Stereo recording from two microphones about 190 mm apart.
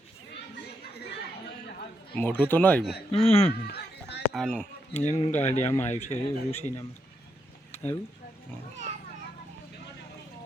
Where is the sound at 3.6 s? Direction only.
55° left (ahead or behind).